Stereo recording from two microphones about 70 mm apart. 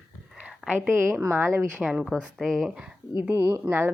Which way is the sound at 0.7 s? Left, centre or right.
Right.